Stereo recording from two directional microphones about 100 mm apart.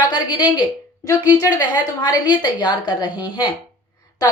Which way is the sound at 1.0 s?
40° left (ahead or behind).